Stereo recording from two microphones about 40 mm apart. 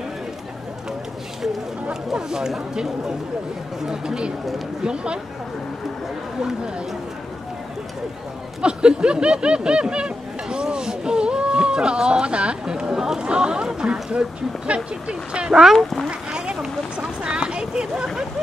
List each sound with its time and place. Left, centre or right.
2.1 s speech: centre
8.5 s snicker: right
13.2 s speech: right
15.0 s speech: right
15.7 s speech: centre
16.1 s speech: right